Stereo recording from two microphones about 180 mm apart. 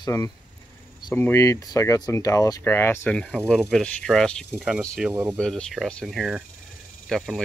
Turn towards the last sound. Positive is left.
turn(degrees=0)  # may be behind; listen again after turning